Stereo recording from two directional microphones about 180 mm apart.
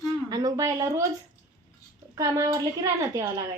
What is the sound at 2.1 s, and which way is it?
A woman's voice, 20° right (ahead or behind).